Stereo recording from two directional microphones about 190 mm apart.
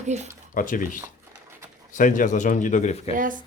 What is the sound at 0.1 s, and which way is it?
Speech, 35° right (ahead or behind).